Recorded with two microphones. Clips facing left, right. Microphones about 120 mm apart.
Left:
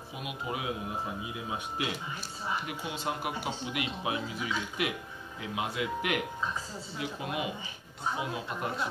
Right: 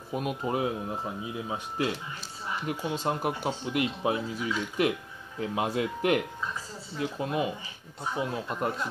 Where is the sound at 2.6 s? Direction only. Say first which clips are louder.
Right 5 dB; 40° right (ahead or behind).